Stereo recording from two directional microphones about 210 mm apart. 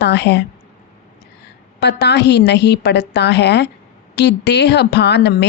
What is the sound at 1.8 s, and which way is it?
Speech, 55° left (ahead or behind).